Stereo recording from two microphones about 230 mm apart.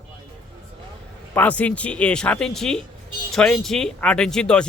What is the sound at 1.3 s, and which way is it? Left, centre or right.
Speech, centre.